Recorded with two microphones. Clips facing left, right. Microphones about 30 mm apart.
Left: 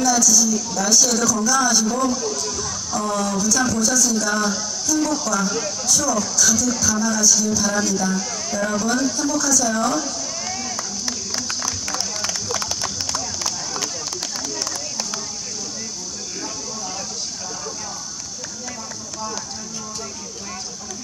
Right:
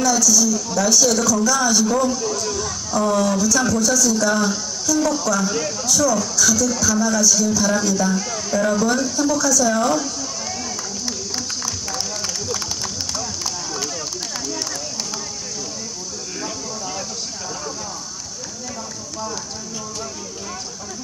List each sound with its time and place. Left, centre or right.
0.0 s speech: centre
2.2 s speech: centre
11.1 s music: centre